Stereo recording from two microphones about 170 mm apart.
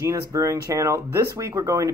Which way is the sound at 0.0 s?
20° right (ahead or behind).